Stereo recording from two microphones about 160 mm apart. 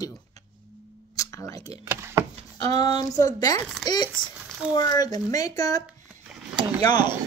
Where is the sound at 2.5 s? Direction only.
25° left (ahead or behind).